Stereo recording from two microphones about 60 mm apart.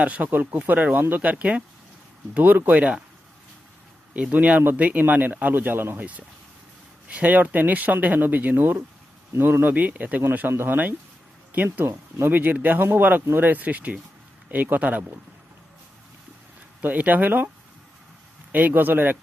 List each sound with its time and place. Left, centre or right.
0.0 s speech: right
4.1 s speech: right
7.1 s speech: right
10.5 s speech: right
11.5 s speech: right
16.8 s speech: right
18.5 s speech: right